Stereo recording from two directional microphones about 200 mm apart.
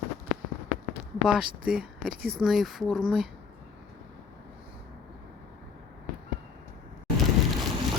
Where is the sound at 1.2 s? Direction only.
5° right (ahead or behind).